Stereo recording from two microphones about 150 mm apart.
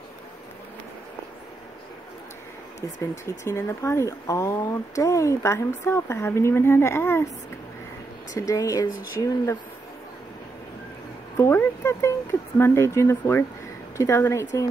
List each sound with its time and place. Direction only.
3.0 s speech: 20° left (ahead or behind)
8.4 s speech: 25° left (ahead or behind)
11.3 s speech: 15° left (ahead or behind)